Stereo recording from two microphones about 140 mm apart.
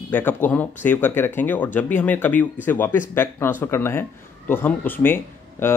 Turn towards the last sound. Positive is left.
turn(degrees=15)  # may be behind; listen again after turning